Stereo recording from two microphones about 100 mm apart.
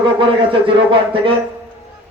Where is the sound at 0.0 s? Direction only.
60° right (ahead or behind).